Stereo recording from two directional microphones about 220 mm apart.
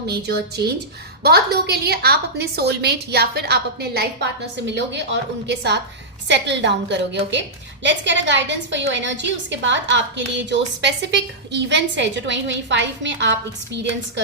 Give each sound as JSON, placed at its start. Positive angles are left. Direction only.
{"t": 0.1, "sound": "a woman's voice", "side_deg": -50}